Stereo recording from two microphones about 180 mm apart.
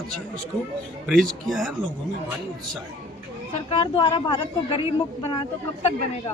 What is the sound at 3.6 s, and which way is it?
A woman's voice, 30° left (ahead or behind).